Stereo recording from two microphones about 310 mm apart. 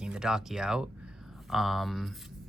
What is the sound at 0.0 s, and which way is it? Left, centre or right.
Speech, centre.